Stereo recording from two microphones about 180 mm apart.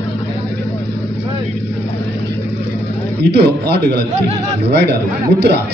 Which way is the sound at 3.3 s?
65° right (ahead or behind).